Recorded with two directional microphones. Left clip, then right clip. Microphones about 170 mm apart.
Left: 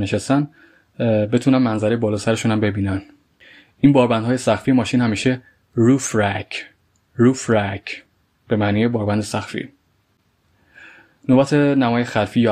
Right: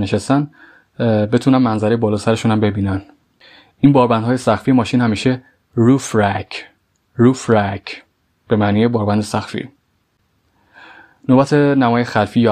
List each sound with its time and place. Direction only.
0.0 s speech: 25° right (ahead or behind)
10.7 s speech: 25° right (ahead or behind)